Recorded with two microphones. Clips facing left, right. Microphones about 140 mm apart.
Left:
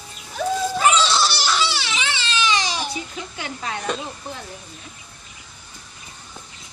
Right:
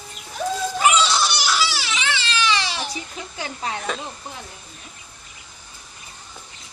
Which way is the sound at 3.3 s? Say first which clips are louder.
Right 3 dB; 30° right (ahead or behind).